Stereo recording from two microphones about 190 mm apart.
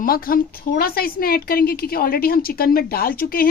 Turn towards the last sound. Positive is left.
turn(degrees=50)  # may be behind; listen again after turning